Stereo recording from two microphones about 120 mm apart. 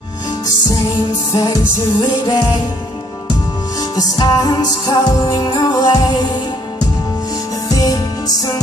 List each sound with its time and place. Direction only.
1.3 s music: 30° left (ahead or behind)
3.9 s music: 30° left (ahead or behind)
7.7 s music: 30° left (ahead or behind)